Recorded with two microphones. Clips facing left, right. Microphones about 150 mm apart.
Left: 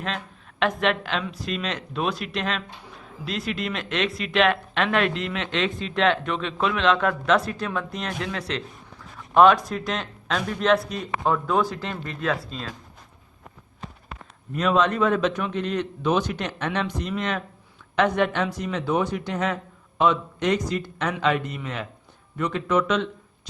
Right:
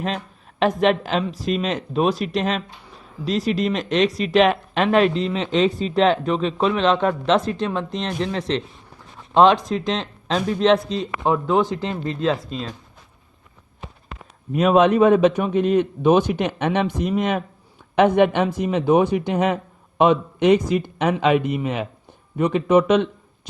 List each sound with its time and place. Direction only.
0.6 s speech: 40° right (ahead or behind)
14.6 s a man's voice: 55° right (ahead or behind)